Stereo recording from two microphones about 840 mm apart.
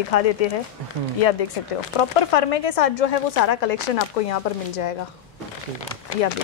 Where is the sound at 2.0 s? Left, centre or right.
Left.